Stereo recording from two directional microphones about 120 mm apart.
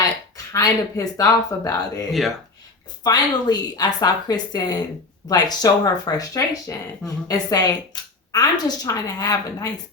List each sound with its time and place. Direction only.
0.5 s speech: 30° left (ahead or behind)